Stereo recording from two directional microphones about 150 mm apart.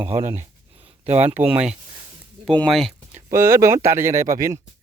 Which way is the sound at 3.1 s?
15° right (ahead or behind).